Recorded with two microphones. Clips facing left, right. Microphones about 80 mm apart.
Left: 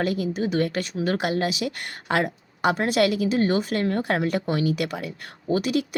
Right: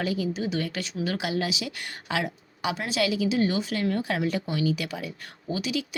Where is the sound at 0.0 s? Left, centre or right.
Left.